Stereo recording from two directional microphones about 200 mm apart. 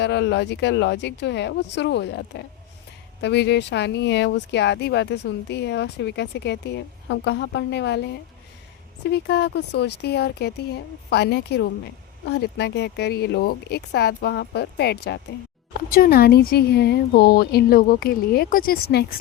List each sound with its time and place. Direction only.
0.0 s speech: 60° left (ahead or behind)